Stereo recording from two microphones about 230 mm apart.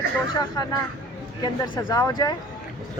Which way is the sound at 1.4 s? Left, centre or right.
Centre.